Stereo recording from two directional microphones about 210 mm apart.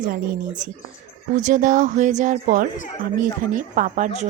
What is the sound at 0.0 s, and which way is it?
Speech, 40° right (ahead or behind).